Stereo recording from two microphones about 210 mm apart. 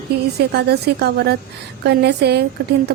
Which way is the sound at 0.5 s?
50° right (ahead or behind).